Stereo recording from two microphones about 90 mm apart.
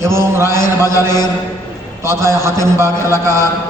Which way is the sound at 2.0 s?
30° right (ahead or behind).